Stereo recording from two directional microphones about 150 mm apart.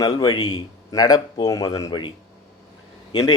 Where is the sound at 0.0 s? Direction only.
25° left (ahead or behind).